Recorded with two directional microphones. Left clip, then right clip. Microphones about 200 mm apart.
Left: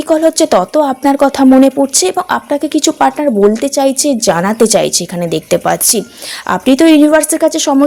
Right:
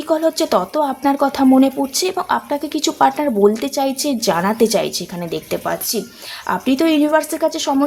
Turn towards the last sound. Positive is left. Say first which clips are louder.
# left 7 dB
turn(degrees=30)  # may be behind; listen again after turning